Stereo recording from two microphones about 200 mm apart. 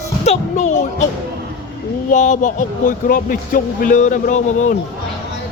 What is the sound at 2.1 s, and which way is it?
Speech, 40° left (ahead or behind).